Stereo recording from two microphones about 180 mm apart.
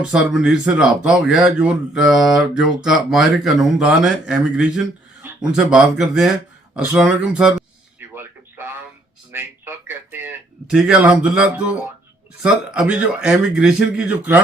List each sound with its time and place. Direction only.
0.0 s speech: 5° right (ahead or behind)
7.9 s a sound: 10° right (ahead or behind)
9.3 s speech: 10° right (ahead or behind)